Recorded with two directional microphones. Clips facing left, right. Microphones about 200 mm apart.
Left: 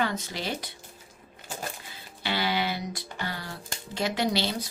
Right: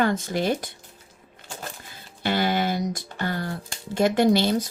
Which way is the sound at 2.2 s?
50° right (ahead or behind).